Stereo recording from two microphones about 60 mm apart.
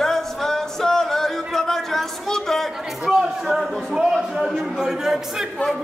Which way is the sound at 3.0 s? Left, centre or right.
Centre.